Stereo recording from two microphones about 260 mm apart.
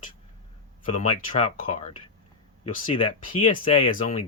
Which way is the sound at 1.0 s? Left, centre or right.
Left.